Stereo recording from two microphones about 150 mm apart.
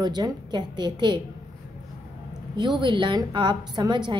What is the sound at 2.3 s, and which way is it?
A woman's voice, 30° right (ahead or behind).